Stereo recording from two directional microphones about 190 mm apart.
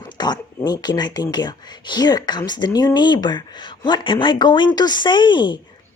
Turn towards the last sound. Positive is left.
turn(degrees=25)  # may be behind; listen again after turning